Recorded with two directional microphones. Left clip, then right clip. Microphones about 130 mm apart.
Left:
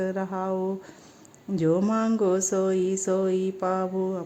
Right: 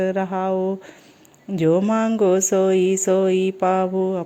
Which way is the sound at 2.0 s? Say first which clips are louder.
Right 6 dB; 20° right (ahead or behind).